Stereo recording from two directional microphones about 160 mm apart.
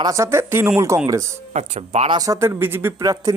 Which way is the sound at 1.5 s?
45° right (ahead or behind).